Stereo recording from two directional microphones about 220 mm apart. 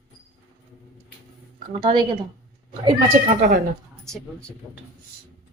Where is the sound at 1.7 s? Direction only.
20° right (ahead or behind).